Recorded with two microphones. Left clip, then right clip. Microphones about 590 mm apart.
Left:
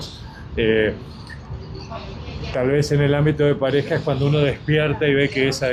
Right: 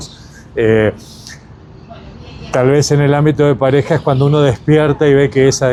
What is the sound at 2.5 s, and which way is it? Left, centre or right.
Speech, right.